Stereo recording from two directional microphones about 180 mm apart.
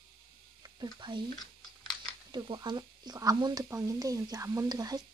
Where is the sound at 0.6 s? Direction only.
20° right (ahead or behind).